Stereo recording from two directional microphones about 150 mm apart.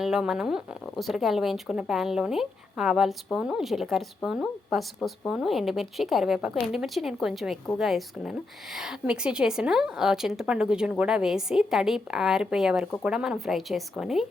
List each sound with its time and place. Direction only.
0.0 s speech: 5° right (ahead or behind)